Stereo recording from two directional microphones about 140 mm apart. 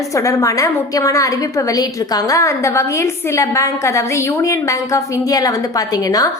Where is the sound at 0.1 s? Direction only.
20° left (ahead or behind).